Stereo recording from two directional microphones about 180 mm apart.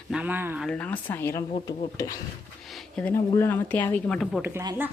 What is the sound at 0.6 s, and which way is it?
A woman's voice, 5° left (ahead or behind).